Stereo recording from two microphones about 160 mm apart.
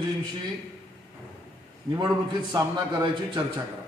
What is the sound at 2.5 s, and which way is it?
Speech, 30° right (ahead or behind).